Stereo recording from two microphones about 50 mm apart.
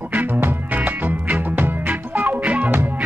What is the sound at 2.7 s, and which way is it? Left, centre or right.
Music, right.